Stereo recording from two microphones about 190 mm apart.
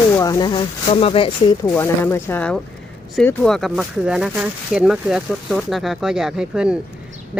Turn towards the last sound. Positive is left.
turn(degrees=-5)  # may be behind; listen again after turning